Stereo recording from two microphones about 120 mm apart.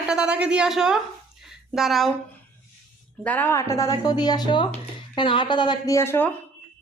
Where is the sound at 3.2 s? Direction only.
15° left (ahead or behind); by 5.9 s 40° left (ahead or behind).